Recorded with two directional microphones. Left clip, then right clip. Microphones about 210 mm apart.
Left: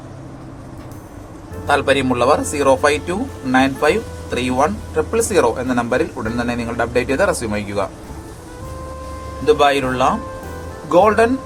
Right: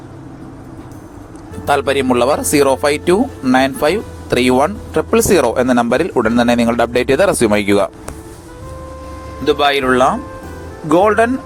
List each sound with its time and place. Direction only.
1.6 s speech: 40° right (ahead or behind)
9.5 s speech: 25° right (ahead or behind)